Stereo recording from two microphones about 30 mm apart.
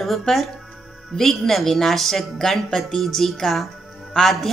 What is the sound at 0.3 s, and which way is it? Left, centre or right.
A man's voice, centre.